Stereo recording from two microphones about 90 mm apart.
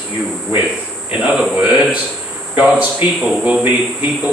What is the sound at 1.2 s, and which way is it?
Speech, 10° right (ahead or behind).